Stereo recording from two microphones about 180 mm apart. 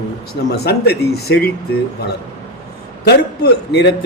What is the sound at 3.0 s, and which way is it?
Speech, 65° left (ahead or behind).